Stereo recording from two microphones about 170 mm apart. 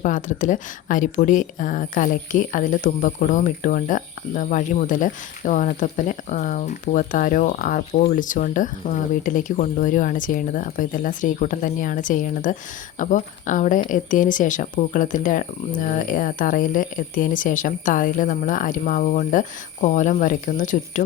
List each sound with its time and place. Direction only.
0.0 s speech: 50° left (ahead or behind)